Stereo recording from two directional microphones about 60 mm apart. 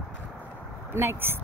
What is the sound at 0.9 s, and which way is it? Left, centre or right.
Speech, right.